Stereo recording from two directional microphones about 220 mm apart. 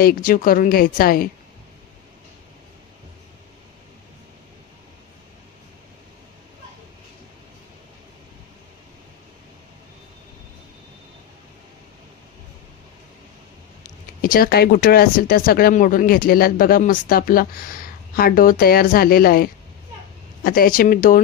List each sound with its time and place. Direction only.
0.0 s speech: 40° left (ahead or behind)
14.2 s speech: 40° left (ahead or behind)